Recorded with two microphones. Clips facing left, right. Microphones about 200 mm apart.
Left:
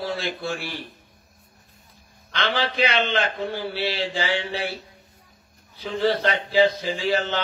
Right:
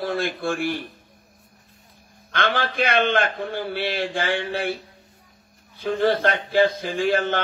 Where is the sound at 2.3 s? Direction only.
50° right (ahead or behind).